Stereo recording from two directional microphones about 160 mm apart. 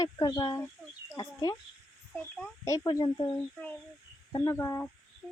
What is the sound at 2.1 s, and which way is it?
Speech, 10° left (ahead or behind).